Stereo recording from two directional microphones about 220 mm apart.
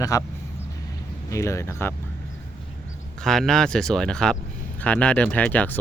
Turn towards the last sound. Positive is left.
turn(degrees=5)  # may be behind; listen again after turning